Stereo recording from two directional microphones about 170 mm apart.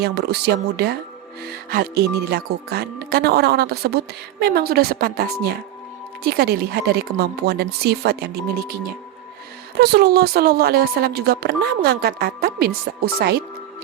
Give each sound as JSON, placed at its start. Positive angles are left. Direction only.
{"t": 0.0, "sound": "speech", "side_deg": -75}
{"t": 9.7, "sound": "speech", "side_deg": -70}